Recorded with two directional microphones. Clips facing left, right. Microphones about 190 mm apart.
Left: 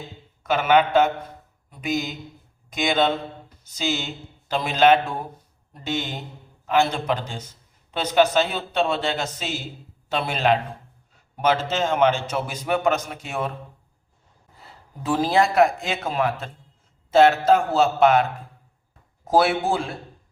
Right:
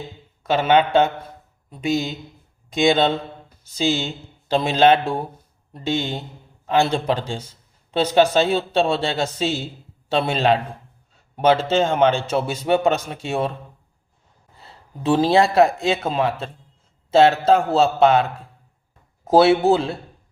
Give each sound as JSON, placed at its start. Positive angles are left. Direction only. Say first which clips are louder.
{"t": 0.4, "sound": "a man's voice", "louder": "right 2 dB", "side_deg": -30}
{"t": 14.6, "sound": "a man's voice", "louder": "right 7 dB", "side_deg": -25}
{"t": 19.3, "sound": "a man's voice", "louder": "right 6 dB", "side_deg": -25}